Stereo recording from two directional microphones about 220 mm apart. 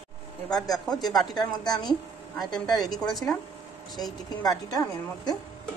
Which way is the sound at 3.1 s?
5° left (ahead or behind).